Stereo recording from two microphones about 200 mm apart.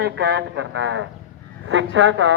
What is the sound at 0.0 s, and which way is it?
Speech, 60° right (ahead or behind).